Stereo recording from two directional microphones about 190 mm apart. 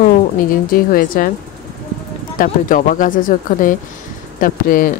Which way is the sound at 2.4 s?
45° left (ahead or behind).